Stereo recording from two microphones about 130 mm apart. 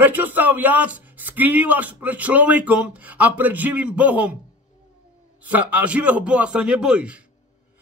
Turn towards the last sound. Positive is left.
turn(degrees=-10)  # may be behind; listen again after turning